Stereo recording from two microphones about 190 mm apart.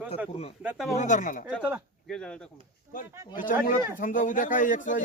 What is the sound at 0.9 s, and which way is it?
Speech, 40° left (ahead or behind).